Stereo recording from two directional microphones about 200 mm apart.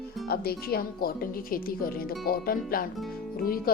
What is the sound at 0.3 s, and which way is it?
Speech, 50° left (ahead or behind).